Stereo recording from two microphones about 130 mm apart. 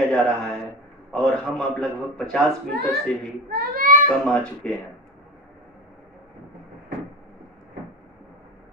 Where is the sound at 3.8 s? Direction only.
90° right.